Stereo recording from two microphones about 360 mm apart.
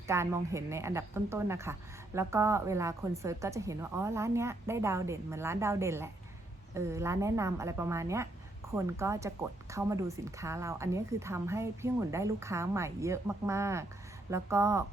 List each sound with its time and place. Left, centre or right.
0.1 s speech: centre